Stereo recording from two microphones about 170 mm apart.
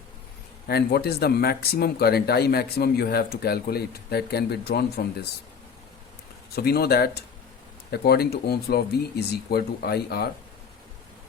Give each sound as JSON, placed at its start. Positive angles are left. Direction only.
{"t": 0.7, "sound": "speech", "side_deg": 70}
{"t": 6.6, "sound": "speech", "side_deg": 65}